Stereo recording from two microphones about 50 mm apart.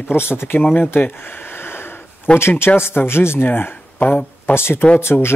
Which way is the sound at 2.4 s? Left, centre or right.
Left.